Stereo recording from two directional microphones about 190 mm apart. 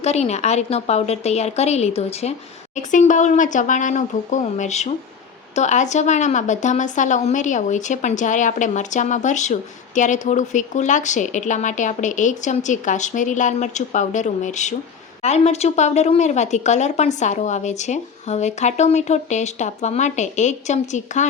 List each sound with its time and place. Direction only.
0.0 s speech: 35° left (ahead or behind)